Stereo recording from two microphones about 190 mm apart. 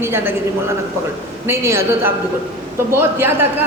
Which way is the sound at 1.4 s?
15° right (ahead or behind).